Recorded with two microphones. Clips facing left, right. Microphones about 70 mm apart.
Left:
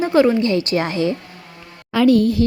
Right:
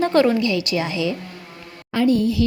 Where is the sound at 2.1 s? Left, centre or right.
Left.